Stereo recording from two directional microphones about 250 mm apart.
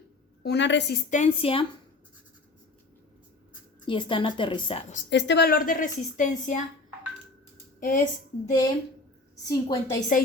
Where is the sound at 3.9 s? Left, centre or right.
Centre.